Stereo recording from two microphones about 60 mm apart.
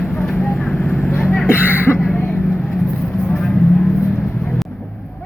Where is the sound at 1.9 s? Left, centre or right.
Left.